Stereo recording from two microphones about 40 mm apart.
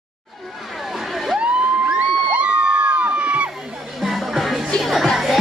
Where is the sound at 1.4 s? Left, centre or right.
Right.